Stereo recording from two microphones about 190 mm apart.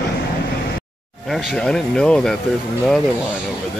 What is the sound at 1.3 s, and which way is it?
Speech, centre (ahead or behind).